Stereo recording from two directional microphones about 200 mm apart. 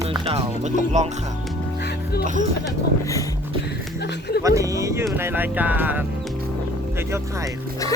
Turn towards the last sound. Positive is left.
turn(degrees=-15)  # may be behind; listen again after turning